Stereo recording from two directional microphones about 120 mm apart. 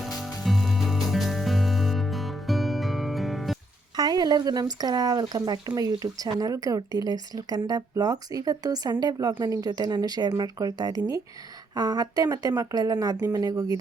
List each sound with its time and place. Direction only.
0.0 s music: centre (ahead or behind)
3.9 s speech: 35° right (ahead or behind)